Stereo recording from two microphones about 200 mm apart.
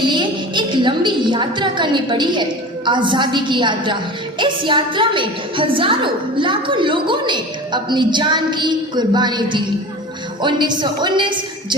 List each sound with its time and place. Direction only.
0.0 s a woman's voice: 25° right (ahead or behind)